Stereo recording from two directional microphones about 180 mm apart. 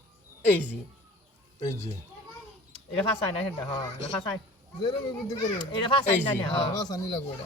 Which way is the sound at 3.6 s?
25° left (ahead or behind).